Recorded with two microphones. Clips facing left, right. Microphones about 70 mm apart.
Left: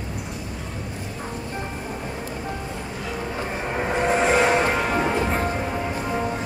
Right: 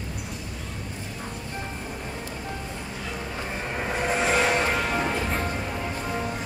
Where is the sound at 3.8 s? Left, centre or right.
Centre.